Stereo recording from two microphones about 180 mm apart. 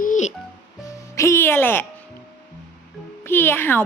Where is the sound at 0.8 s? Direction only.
15° left (ahead or behind).